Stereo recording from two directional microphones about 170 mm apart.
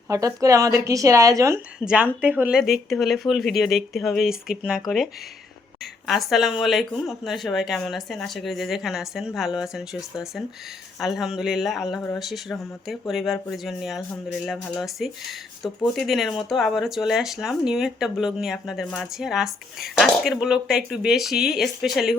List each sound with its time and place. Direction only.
0.1 s a woman's voice: 20° right (ahead or behind)
1.8 s speech: 5° right (ahead or behind)